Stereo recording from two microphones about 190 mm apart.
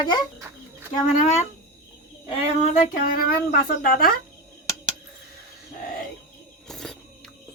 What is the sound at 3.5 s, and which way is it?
Speech, 50° left (ahead or behind).